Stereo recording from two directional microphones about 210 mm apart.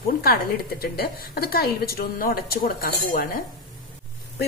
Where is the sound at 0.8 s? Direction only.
45° left (ahead or behind).